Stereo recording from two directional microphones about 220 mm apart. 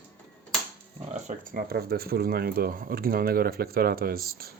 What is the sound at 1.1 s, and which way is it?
Speech, 35° right (ahead or behind).